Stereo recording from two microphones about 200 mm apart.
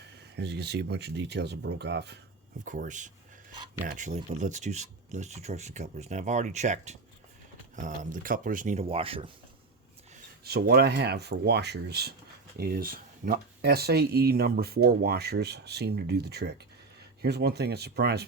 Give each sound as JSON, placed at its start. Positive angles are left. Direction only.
{"t": 0.3, "sound": "speech", "side_deg": -55}
{"t": 2.6, "sound": "speech", "side_deg": -40}
{"t": 10.4, "sound": "speech", "side_deg": -55}